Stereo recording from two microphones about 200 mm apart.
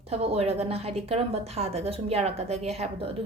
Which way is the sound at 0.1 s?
30° right (ahead or behind).